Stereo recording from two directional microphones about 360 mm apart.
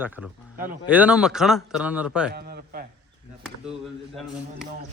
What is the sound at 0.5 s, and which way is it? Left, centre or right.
Speech, right.